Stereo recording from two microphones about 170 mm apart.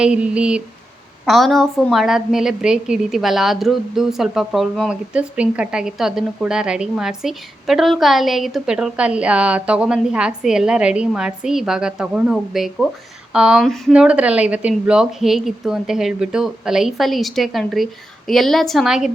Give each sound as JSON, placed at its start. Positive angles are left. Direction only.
{"t": 0.0, "sound": "a woman's voice", "side_deg": -5}